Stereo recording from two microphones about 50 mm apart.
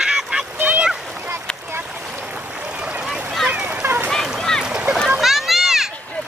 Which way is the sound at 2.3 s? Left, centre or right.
Right.